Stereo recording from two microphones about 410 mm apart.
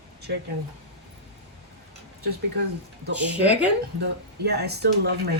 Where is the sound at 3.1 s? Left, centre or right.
Centre.